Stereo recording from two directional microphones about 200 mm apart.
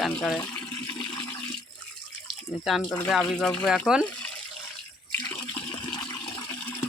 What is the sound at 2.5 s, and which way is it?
Speech, centre (ahead or behind).